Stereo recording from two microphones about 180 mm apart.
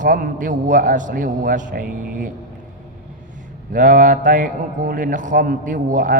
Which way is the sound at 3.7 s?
45° right (ahead or behind).